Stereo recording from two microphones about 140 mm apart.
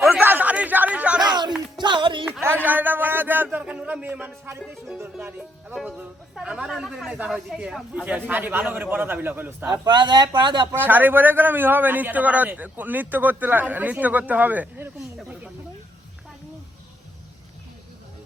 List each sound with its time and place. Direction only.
0.0 s chatter: 10° right (ahead or behind)
1.2 s a sound: 30° right (ahead or behind)
1.8 s music: 35° right (ahead or behind)
2.4 s a sound: 15° right (ahead or behind)
4.6 s music: centre (ahead or behind)
4.9 s a man's voice: 15° right (ahead or behind)
9.6 s speech: 30° right (ahead or behind)
10.8 s a man's voice: 15° right (ahead or behind)